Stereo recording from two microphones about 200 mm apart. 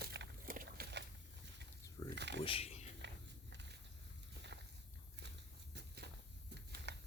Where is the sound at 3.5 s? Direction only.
60° right (ahead or behind).